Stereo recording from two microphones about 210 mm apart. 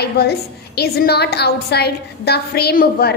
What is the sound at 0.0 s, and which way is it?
A woman's voice, 50° left (ahead or behind).